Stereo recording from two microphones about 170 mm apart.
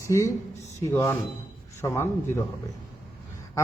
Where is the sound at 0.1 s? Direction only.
15° left (ahead or behind).